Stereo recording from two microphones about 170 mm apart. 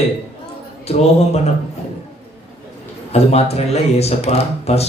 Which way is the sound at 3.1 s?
40° left (ahead or behind).